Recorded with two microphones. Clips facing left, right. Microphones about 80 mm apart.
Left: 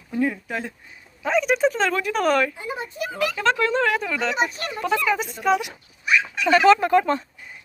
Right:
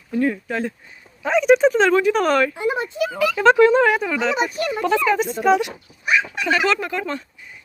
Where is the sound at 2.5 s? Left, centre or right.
Right.